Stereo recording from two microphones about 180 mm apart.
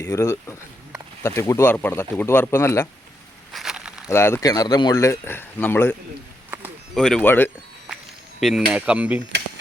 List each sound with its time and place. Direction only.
0.0 s speech: 15° left (ahead or behind)
1.4 s speech: 15° left (ahead or behind)
3.5 s a sound: centre (ahead or behind)
4.1 s speech: 15° left (ahead or behind)
8.4 s speech: centre (ahead or behind)